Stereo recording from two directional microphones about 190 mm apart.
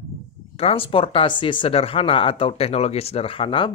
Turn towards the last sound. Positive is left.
turn(degrees=25)  # may be behind; listen again after turning